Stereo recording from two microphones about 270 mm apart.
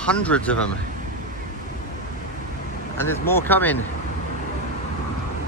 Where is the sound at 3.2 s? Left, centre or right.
Centre.